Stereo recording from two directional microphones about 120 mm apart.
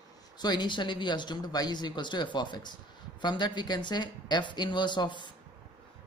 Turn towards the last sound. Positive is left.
turn(degrees=40)  # may be behind; listen again after turning